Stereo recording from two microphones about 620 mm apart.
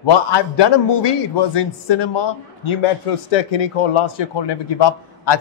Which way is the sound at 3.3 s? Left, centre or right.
Left.